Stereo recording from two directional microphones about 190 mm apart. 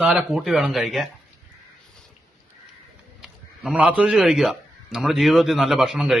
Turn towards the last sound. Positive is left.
turn(degrees=0)  # may be behind; listen again after turning